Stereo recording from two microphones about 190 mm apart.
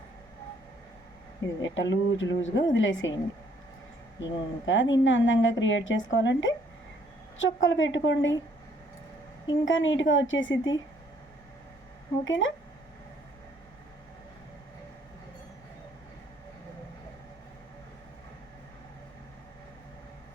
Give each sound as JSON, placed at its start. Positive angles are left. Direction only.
{"t": 1.6, "sound": "a woman's voice", "side_deg": 75}
{"t": 4.2, "sound": "a woman's voice", "side_deg": 80}
{"t": 9.5, "sound": "a woman's voice", "side_deg": 85}
{"t": 12.2, "sound": "a woman's voice", "side_deg": 80}